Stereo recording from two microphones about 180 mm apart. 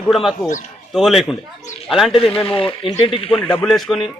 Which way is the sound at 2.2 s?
30° left (ahead or behind).